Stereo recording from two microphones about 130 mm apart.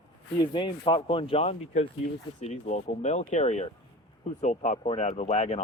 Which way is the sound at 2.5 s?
60° left (ahead or behind).